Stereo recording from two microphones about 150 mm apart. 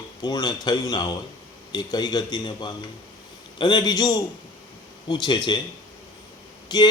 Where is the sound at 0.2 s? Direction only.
25° left (ahead or behind).